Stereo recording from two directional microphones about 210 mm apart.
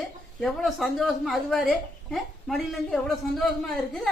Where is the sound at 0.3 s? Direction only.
Centre (ahead or behind).